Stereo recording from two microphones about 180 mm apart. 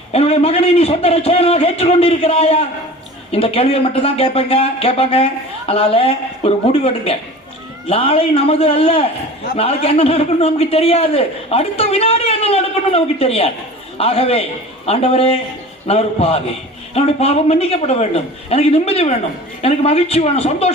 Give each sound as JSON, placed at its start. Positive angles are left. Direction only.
{"t": 0.1, "sound": "a man's voice", "side_deg": 35}